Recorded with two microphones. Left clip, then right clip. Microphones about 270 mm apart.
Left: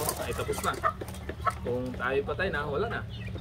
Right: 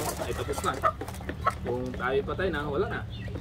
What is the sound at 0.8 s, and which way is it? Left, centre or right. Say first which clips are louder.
Speech: right 3 dB; right.